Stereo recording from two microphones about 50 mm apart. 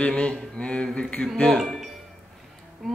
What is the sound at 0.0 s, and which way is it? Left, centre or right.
Speech, centre.